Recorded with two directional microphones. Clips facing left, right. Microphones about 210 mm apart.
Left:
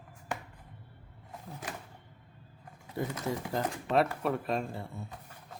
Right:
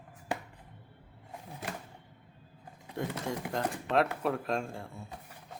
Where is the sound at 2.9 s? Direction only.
Centre (ahead or behind).